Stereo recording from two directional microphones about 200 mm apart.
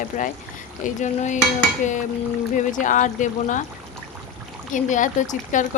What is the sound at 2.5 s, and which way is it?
Speech, 40° left (ahead or behind).